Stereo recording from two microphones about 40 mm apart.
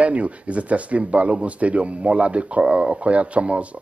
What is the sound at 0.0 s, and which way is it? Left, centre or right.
Speech, right.